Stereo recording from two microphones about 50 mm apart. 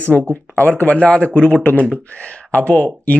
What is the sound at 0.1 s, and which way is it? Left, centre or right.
Speech, right.